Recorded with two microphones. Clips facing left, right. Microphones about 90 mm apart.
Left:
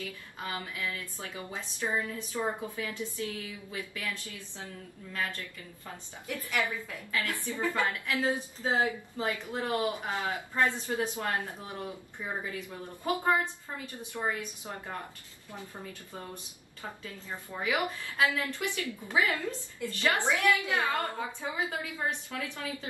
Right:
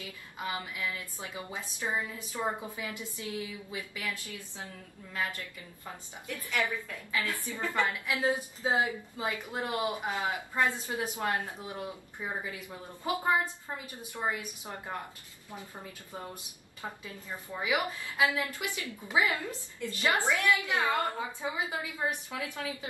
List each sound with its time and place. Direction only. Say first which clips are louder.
0.0 s a woman's voice: even; 15° right (ahead or behind)
6.2 s a woman's voice: even; 15° left (ahead or behind)
7.1 s a woman's voice: even; 20° right (ahead or behind)
7.3 s a woman's voice: left 1 dB; 20° left (ahead or behind)
7.8 s a woman's voice: right 3 dB; 20° right (ahead or behind)
17.6 s a woman's voice: even; 15° right (ahead or behind)